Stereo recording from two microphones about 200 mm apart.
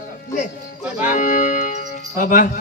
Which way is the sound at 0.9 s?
40° left (ahead or behind).